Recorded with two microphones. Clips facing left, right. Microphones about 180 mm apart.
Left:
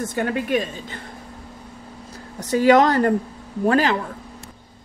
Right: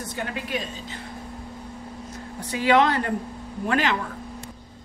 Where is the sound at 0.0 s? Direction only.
50° left (ahead or behind).